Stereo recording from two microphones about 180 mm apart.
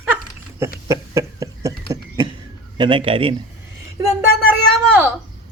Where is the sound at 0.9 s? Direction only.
20° right (ahead or behind).